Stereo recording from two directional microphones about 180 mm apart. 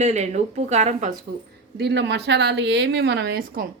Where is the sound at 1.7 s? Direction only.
70° right (ahead or behind).